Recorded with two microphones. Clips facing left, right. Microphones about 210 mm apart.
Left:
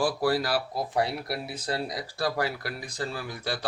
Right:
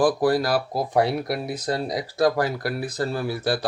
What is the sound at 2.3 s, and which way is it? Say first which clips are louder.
Speech: right 6 dB; 45° right (ahead or behind).